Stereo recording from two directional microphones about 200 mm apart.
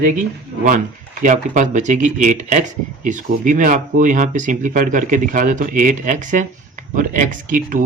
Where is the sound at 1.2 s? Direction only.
40° right (ahead or behind).